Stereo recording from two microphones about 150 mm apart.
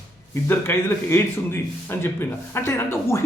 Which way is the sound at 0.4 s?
15° left (ahead or behind).